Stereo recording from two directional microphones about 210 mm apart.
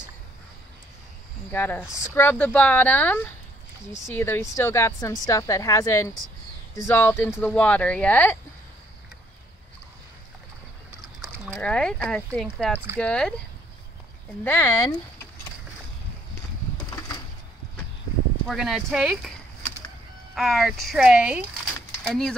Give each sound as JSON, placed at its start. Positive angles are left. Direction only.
{"t": 1.5, "sound": "a woman's voice", "side_deg": 10}
{"t": 11.1, "sound": "speech", "side_deg": 0}
{"t": 14.4, "sound": "a woman's voice", "side_deg": 10}
{"t": 16.7, "sound": "a sound", "side_deg": 20}
{"t": 18.5, "sound": "speech", "side_deg": 0}
{"t": 20.3, "sound": "speech", "side_deg": 0}